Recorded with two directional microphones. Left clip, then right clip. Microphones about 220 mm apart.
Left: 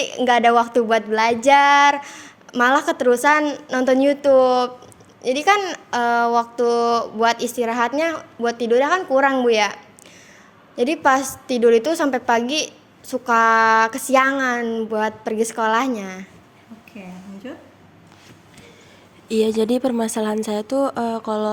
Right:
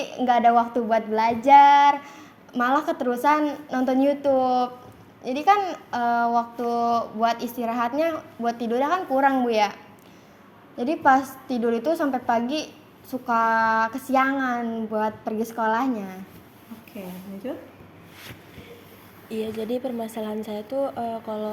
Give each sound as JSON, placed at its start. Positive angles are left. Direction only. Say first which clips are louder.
{"t": 0.0, "sound": "a woman's voice", "louder": "left 3 dB", "side_deg": 45}
{"t": 17.4, "sound": "a woman's voice", "louder": "right 3 dB", "side_deg": 20}
{"t": 19.3, "sound": "a woman's voice", "louder": "left 10 dB", "side_deg": 45}